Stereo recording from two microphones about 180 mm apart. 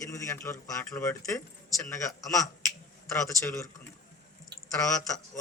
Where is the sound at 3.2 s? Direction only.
15° left (ahead or behind).